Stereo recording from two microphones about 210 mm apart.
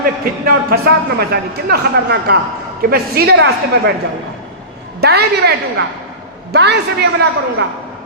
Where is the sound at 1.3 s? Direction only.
50° right (ahead or behind).